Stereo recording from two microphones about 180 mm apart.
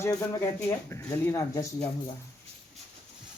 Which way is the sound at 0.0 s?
15° left (ahead or behind).